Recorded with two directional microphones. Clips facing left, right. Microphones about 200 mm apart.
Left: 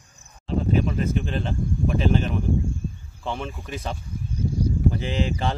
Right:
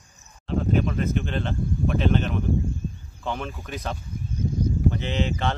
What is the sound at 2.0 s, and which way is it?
Speech, 5° left (ahead or behind).